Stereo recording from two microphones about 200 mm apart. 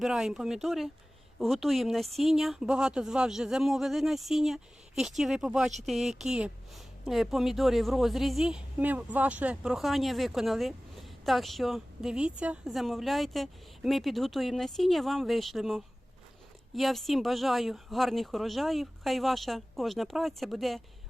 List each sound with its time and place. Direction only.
0.0 s speech: centre (ahead or behind)